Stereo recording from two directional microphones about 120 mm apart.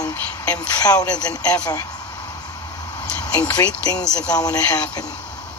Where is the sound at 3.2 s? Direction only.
35° left (ahead or behind).